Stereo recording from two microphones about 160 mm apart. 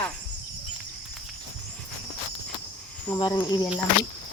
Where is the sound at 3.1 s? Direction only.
25° left (ahead or behind).